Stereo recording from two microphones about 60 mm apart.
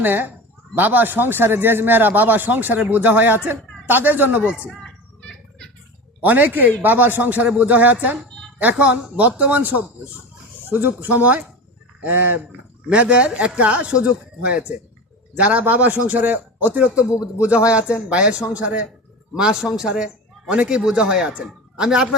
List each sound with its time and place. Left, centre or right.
0.0 s a man's voice: right
4.8 s children playing: centre
6.2 s speech: right
12.9 s speech: centre
19.4 s a man's voice: centre